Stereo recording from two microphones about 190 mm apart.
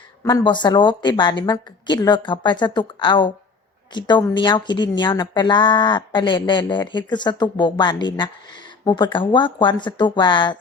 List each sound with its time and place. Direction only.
0.3 s speech: 20° left (ahead or behind)